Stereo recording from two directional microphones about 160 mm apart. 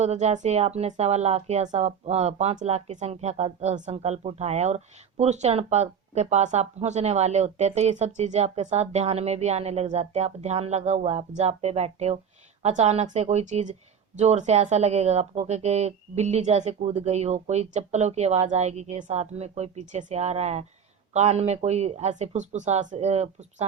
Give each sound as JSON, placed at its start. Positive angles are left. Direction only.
{"t": 0.0, "sound": "speech", "side_deg": -45}